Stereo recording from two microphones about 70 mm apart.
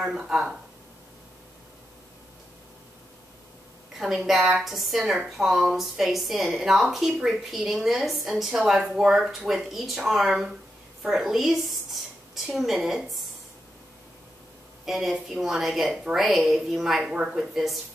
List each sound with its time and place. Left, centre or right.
0.0 s speech: centre
4.0 s a woman's voice: centre
11.0 s a sound: centre
12.5 s a woman's voice: centre
14.9 s a woman's voice: centre